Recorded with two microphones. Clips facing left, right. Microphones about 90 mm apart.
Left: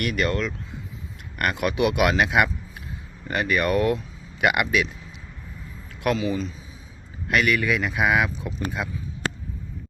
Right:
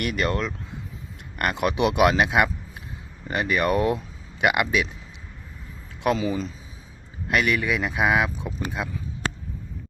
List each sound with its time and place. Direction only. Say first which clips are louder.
0.0 s speech: left 1 dB; 25° right (ahead or behind)
6.1 s speech: even; 35° right (ahead or behind)
7.3 s speech: left 1 dB; 25° right (ahead or behind)